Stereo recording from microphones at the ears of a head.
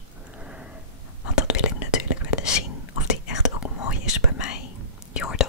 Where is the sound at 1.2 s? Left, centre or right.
Left.